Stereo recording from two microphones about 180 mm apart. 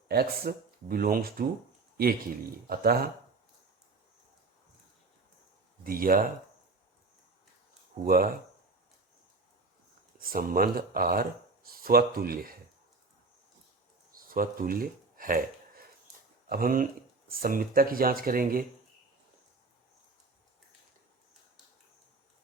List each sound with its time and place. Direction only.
0.1 s speech: 55° right (ahead or behind)
2.6 s speech: 55° right (ahead or behind)
5.8 s speech: 50° right (ahead or behind)
7.9 s speech: 55° right (ahead or behind)
10.2 s speech: 55° right (ahead or behind)
14.2 s speech: 50° right (ahead or behind)
16.5 s speech: 55° right (ahead or behind)